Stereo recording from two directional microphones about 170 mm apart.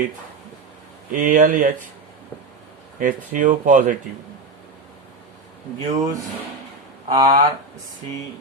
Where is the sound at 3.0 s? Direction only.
50° right (ahead or behind).